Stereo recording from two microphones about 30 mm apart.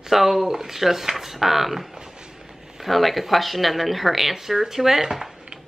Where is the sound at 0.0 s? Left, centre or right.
Centre.